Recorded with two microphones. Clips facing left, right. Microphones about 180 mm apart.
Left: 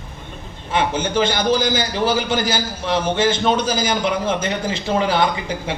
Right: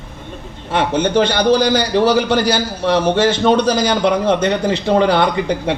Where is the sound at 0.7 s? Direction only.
65° right (ahead or behind).